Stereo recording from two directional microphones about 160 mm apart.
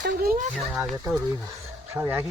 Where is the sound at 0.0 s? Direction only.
65° right (ahead or behind).